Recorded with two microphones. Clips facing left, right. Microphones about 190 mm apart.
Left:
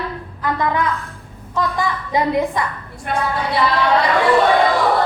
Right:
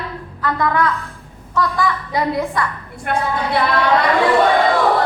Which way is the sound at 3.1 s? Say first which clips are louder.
Right 1 dB; 60° right (ahead or behind).